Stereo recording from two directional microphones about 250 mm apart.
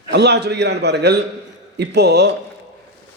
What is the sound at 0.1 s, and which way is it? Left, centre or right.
A man's voice, right.